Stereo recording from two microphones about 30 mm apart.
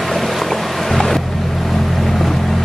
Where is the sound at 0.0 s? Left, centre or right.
Centre.